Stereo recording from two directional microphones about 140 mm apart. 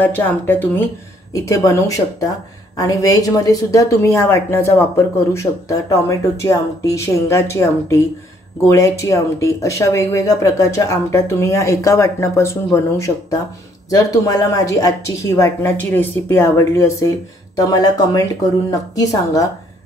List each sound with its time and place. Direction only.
0.0 s speech: 10° left (ahead or behind)